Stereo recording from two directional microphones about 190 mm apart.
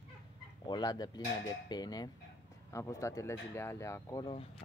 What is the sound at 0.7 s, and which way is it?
Speech, 20° left (ahead or behind).